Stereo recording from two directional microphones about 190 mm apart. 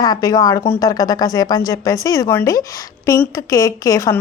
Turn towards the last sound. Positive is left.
turn(degrees=15)  # may be behind; listen again after turning